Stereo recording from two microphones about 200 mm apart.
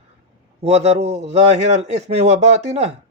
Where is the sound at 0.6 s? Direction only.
30° right (ahead or behind).